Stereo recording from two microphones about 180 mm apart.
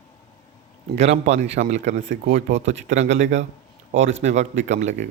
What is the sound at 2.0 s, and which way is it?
Speech, 75° right (ahead or behind).